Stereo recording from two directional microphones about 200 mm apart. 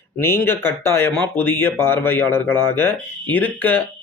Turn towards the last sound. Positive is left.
turn(degrees=10)  # may be behind; listen again after turning